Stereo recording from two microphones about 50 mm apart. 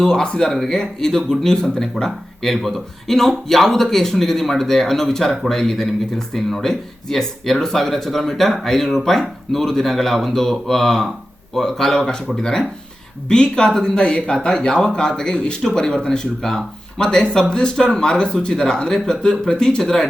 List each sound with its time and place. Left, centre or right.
0.0 s speech: centre